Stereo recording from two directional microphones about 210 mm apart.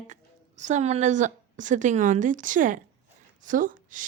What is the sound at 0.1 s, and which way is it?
A woman's voice, 35° right (ahead or behind).